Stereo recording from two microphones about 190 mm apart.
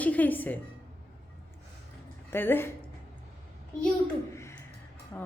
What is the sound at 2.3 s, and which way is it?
Speech, 10° left (ahead or behind).